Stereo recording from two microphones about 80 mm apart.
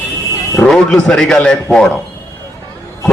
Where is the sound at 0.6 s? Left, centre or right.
Centre.